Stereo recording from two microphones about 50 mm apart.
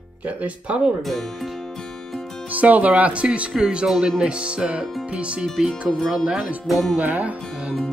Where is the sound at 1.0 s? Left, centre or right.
Centre.